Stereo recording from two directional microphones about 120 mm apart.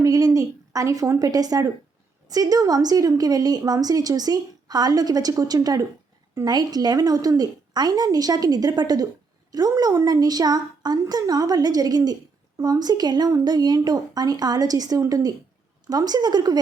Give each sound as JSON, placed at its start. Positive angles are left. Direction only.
{"t": 0.0, "sound": "a woman's voice", "side_deg": -30}